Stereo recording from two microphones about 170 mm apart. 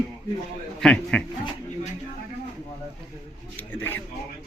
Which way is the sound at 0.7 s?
5° left (ahead or behind).